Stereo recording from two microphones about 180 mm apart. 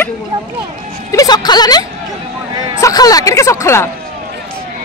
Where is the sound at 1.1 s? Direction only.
20° left (ahead or behind).